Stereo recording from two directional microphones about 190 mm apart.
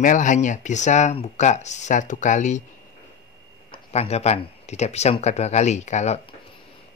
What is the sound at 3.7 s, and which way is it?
Speech, 35° left (ahead or behind).